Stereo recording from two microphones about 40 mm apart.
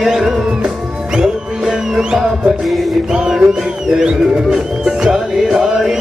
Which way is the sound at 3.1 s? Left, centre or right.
Centre.